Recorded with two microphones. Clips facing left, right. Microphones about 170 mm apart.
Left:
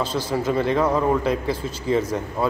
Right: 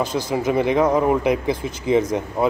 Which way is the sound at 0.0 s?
15° right (ahead or behind).